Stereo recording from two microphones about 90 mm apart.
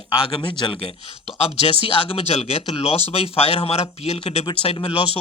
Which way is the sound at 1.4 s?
90° left.